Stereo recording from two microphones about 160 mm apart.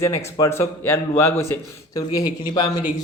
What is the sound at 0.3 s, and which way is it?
Speech, 20° left (ahead or behind).